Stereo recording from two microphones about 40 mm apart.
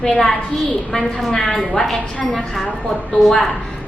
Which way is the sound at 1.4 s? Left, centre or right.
Centre.